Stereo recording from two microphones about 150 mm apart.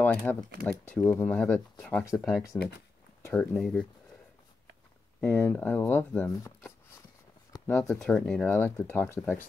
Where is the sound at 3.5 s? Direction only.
5° left (ahead or behind).